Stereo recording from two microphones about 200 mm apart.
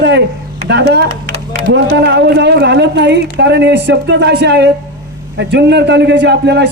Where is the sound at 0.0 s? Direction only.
60° right (ahead or behind).